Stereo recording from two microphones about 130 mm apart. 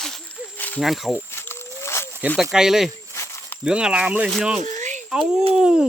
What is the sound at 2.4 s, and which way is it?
Speech, 5° right (ahead or behind).